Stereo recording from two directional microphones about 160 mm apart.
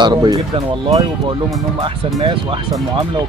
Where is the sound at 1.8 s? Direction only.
30° right (ahead or behind).